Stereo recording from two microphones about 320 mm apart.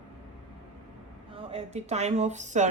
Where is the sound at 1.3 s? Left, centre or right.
Centre.